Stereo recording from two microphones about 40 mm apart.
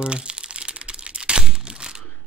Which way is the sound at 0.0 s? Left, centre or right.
Right.